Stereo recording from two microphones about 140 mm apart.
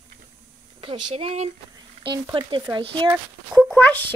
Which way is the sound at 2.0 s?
35° right (ahead or behind).